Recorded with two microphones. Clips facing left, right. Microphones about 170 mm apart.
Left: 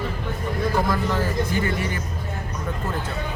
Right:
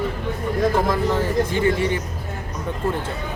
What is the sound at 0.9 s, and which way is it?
A woman's voice, 25° right (ahead or behind).